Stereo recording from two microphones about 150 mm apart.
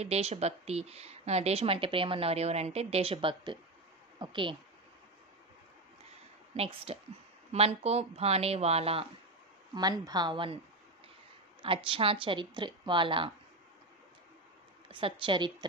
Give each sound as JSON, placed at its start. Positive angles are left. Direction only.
{"t": 0.0, "sound": "a woman's voice", "side_deg": -45}
{"t": 6.5, "sound": "a woman's voice", "side_deg": -40}
{"t": 9.8, "sound": "a woman's voice", "side_deg": -25}
{"t": 11.6, "sound": "a woman's voice", "side_deg": -35}
{"t": 14.9, "sound": "a woman's voice", "side_deg": -35}